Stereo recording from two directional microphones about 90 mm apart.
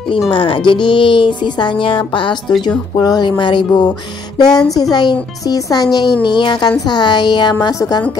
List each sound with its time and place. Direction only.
0.3 s speech: 70° left (ahead or behind)
2.9 s speech: 50° left (ahead or behind)
4.6 s a child's voice: 45° left (ahead or behind)
6.2 s a child's voice: 55° left (ahead or behind)